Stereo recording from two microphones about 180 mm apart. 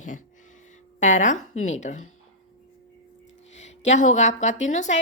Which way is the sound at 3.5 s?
40° left (ahead or behind).